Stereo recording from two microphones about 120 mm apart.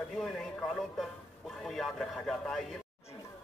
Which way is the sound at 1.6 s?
Centre (ahead or behind).